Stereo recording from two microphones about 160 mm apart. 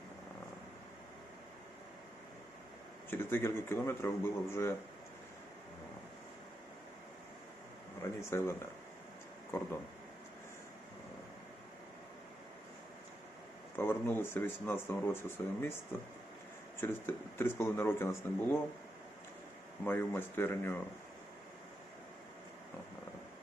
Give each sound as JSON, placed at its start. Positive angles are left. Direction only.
{"t": 3.1, "sound": "speech", "side_deg": 15}
{"t": 8.3, "sound": "speech", "side_deg": 15}
{"t": 13.7, "sound": "speech", "side_deg": 15}
{"t": 16.8, "sound": "speech", "side_deg": 15}
{"t": 19.8, "sound": "speech", "side_deg": 10}